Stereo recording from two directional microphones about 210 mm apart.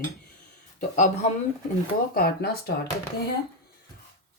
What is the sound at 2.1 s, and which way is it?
Speech, 45° left (ahead or behind).